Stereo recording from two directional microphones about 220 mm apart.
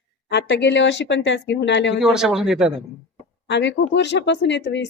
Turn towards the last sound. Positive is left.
turn(degrees=50)  # may be behind; listen again after turning